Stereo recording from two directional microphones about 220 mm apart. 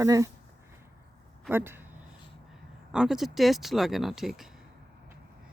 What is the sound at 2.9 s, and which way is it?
Speech, centre (ahead or behind).